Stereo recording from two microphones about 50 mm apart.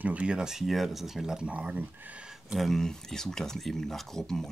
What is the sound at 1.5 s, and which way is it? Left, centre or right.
Speech, right.